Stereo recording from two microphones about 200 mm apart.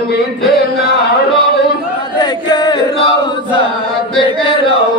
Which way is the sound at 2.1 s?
20° left (ahead or behind).